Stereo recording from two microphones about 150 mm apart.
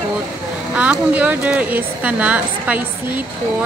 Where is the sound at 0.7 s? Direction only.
10° right (ahead or behind).